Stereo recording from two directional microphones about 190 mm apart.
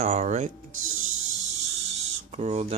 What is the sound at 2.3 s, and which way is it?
Speech, 35° right (ahead or behind).